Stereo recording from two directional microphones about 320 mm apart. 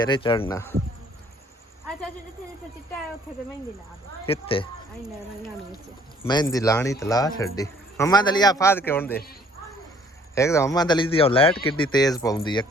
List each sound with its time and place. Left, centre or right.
0.0 s a man's voice: centre
4.3 s a man's voice: centre
6.2 s a man's voice: centre
10.3 s a man's voice: centre